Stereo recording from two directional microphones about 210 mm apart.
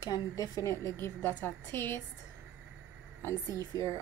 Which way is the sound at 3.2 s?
10° left (ahead or behind).